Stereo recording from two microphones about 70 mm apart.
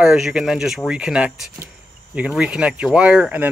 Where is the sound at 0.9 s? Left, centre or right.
Centre.